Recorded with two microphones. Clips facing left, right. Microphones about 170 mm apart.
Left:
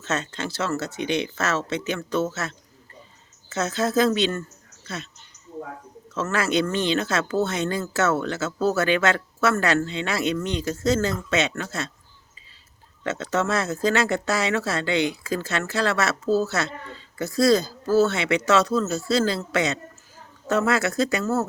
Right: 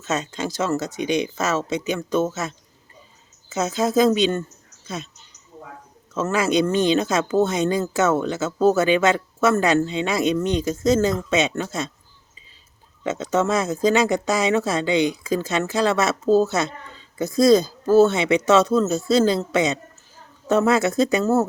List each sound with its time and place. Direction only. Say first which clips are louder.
0.0 s speech: right 3 dB; 10° right (ahead or behind)
6.1 s speech: right 3 dB; 15° right (ahead or behind)
13.1 s speech: right 3 dB; 15° right (ahead or behind)